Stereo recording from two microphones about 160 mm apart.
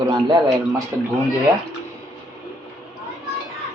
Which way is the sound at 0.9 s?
15° right (ahead or behind).